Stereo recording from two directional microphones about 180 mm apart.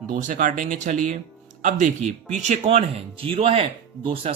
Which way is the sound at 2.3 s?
40° right (ahead or behind).